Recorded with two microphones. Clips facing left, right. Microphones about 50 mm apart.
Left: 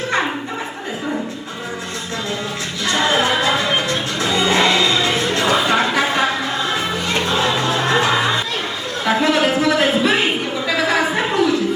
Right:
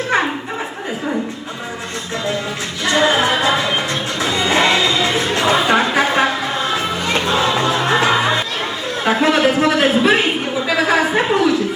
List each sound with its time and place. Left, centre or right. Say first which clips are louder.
2.8 s music: right 2 dB; centre
7.7 s music: right 1 dB; centre
9.0 s a sound: right 2 dB; right